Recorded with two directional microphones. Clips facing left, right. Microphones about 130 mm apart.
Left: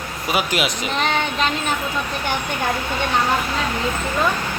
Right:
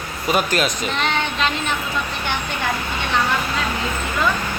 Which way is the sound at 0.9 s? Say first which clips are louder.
Left 1 dB; 40° left (ahead or behind).